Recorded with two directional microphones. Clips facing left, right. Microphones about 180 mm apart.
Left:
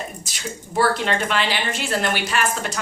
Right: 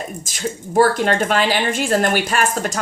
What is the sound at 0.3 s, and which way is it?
Speech, 45° right (ahead or behind).